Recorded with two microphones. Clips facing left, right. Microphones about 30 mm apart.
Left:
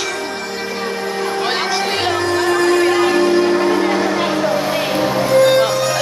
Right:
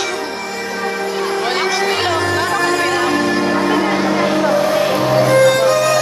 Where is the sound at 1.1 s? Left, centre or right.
Right.